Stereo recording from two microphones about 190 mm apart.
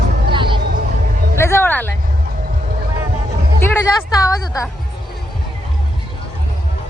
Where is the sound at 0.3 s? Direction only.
25° right (ahead or behind).